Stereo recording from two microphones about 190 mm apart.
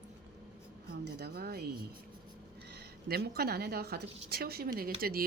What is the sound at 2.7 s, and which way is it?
A woman's voice, 55° right (ahead or behind).